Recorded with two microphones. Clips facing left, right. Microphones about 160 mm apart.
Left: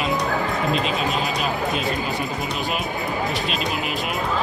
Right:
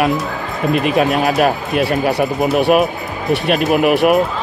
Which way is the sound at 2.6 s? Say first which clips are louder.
Right 12 dB; 60° right (ahead or behind).